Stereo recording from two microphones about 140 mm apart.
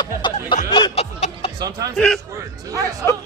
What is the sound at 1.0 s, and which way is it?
Music, 45° left (ahead or behind).